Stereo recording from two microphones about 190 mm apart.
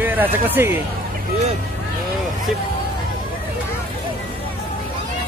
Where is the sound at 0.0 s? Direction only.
10° right (ahead or behind).